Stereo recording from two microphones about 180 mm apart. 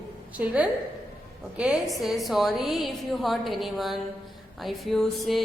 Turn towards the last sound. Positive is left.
turn(degrees=0)  # may be behind; listen again after turning